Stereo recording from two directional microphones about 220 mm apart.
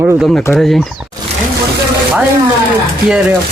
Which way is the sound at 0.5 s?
Centre (ahead or behind).